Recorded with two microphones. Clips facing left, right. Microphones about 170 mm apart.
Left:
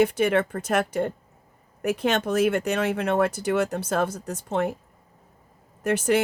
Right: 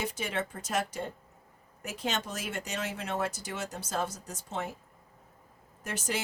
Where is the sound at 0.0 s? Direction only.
60° left (ahead or behind).